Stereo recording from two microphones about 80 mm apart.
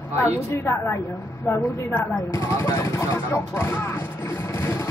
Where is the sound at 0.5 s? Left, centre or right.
Left.